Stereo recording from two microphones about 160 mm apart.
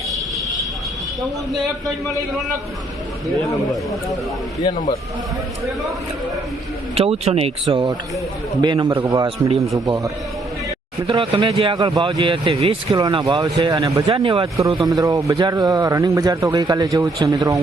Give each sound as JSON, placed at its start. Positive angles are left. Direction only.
{"t": 6.9, "sound": "speech", "side_deg": -40}
{"t": 8.9, "sound": "speech", "side_deg": -15}
{"t": 9.1, "sound": "speech", "side_deg": -30}
{"t": 9.7, "sound": "speech", "side_deg": -20}
{"t": 11.0, "sound": "speech", "side_deg": -30}
{"t": 14.4, "sound": "speech", "side_deg": -20}